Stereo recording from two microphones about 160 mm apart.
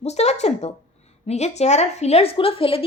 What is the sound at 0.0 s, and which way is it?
A woman's voice, 45° left (ahead or behind).